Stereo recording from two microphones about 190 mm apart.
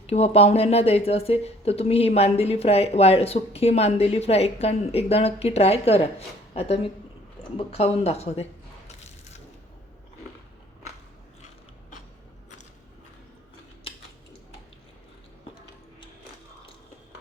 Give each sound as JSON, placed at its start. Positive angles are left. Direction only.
{"t": 0.1, "sound": "speech", "side_deg": 30}